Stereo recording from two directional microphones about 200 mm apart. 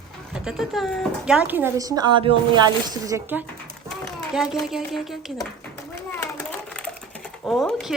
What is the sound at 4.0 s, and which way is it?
A child's voice, centre (ahead or behind).